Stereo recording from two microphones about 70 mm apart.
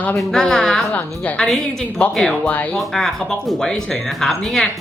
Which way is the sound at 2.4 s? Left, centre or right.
Left.